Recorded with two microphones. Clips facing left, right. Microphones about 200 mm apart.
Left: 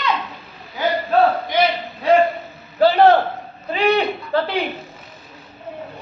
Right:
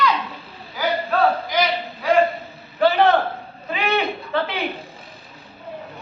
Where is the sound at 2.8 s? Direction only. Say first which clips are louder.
Left 4 dB; 35° left (ahead or behind).